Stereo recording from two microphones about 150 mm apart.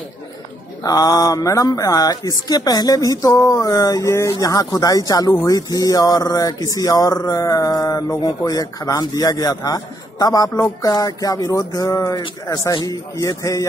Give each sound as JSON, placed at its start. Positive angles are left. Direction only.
{"t": 0.8, "sound": "speech", "side_deg": 25}